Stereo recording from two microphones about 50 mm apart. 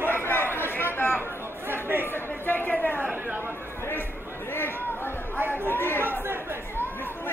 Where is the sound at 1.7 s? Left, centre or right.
Right.